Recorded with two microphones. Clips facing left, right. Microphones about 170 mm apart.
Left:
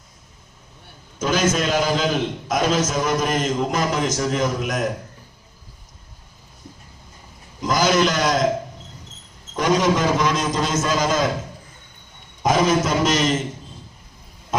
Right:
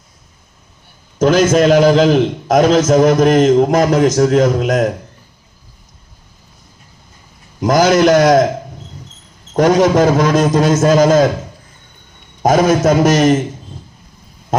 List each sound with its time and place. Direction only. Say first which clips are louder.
1.2 s a man's voice: right 10 dB; 45° right (ahead or behind); by 4.9 s 65° right (ahead or behind)
7.6 s a man's voice: right 8 dB; 65° right (ahead or behind)
9.6 s a man's voice: right 8 dB; 55° right (ahead or behind)
12.4 s a man's voice: right 7 dB; 55° right (ahead or behind)